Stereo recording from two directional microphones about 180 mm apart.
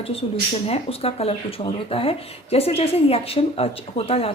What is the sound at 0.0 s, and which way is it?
A woman's voice, 35° left (ahead or behind).